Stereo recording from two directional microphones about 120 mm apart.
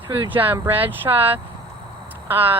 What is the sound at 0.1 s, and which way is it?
Speech, 15° right (ahead or behind).